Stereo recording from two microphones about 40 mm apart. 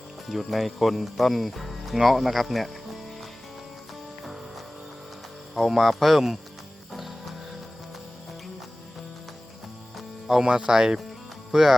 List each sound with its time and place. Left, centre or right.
0.3 s speech: centre
2.0 s music: centre
5.5 s speech: centre
10.2 s speech: centre